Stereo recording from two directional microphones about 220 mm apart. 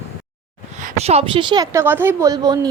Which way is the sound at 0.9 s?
30° right (ahead or behind).